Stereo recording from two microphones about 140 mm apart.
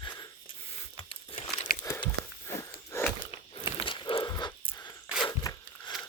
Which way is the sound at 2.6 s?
20° left (ahead or behind).